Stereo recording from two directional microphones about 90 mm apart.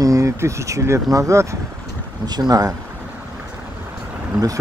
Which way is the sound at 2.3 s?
50° right (ahead or behind).